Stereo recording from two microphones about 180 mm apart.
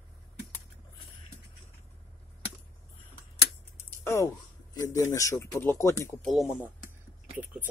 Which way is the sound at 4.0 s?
15° left (ahead or behind).